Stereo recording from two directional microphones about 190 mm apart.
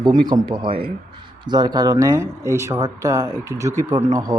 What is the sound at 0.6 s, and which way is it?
Speech, 50° right (ahead or behind).